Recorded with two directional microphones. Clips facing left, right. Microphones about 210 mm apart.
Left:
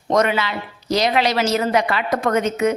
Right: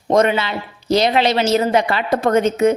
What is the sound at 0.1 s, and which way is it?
A woman's voice, 25° right (ahead or behind).